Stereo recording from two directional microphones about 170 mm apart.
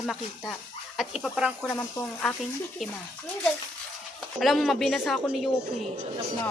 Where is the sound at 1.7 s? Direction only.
15° left (ahead or behind).